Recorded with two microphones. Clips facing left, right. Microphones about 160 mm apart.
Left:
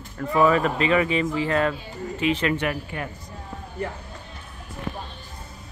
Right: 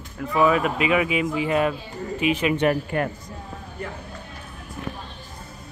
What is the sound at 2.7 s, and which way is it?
Speech, 55° right (ahead or behind).